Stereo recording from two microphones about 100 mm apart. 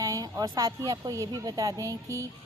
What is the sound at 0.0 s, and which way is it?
Speech, 35° right (ahead or behind).